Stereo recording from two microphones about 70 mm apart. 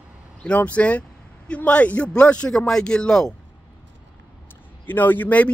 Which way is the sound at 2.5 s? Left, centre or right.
Centre.